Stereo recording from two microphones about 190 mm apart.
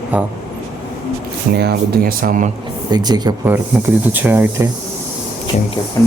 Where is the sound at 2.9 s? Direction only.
20° right (ahead or behind).